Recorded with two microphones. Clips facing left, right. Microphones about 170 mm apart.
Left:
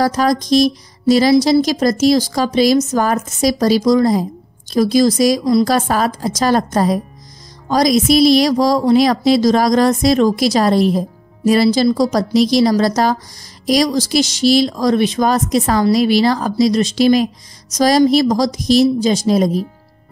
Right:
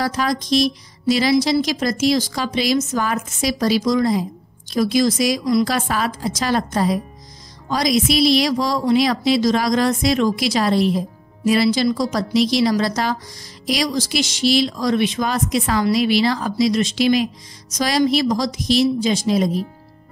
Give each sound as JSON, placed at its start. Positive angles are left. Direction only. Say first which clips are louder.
{"t": 0.0, "sound": "a woman's voice", "louder": "left 6 dB", "side_deg": 40}